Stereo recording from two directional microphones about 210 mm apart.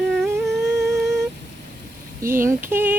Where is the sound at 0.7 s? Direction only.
15° right (ahead or behind).